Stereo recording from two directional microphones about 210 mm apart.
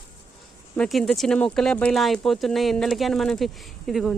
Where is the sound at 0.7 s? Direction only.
5° left (ahead or behind).